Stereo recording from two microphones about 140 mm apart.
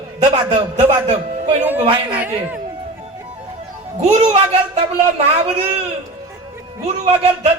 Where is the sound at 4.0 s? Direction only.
50° right (ahead or behind).